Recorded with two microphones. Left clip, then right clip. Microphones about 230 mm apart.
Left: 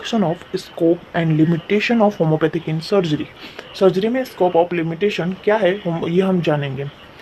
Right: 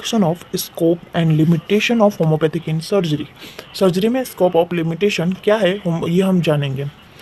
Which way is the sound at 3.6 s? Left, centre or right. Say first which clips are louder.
Left 1 dB; right.